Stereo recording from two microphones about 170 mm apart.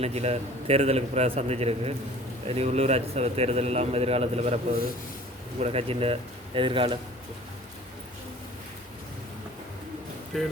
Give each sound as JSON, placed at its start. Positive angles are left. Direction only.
{"t": 0.0, "sound": "a man's voice", "side_deg": -35}
{"t": 10.3, "sound": "speech", "side_deg": 0}